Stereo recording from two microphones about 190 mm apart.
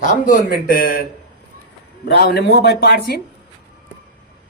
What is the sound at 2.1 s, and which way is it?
Speech, 60° left (ahead or behind).